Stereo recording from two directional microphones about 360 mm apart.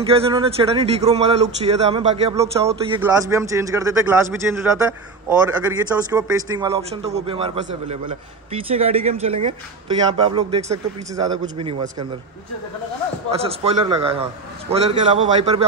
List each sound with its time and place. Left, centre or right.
0.0 s speech: centre
13.3 s speech: centre